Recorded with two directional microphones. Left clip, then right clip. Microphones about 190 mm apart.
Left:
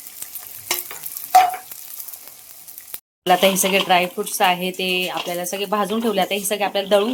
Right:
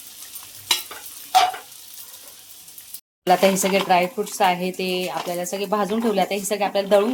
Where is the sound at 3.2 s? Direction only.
Centre (ahead or behind).